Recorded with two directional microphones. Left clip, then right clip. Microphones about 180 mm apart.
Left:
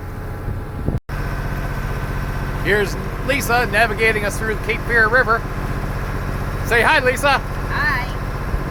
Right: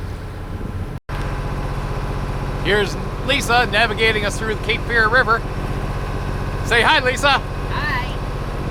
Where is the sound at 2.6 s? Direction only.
Centre (ahead or behind).